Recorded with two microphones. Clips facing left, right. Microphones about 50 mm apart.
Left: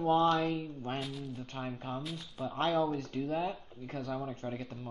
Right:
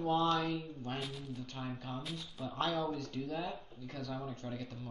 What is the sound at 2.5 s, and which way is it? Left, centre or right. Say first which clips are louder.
Speech: left 5 dB; left.